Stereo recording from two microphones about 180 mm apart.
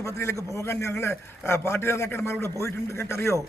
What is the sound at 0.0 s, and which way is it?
A man's voice, 15° left (ahead or behind).